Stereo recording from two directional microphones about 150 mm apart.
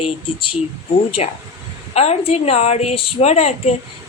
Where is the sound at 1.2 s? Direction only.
45° left (ahead or behind).